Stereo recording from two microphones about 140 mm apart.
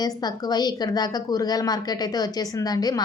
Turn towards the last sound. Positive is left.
turn(degrees=30)  # may be behind; listen again after turning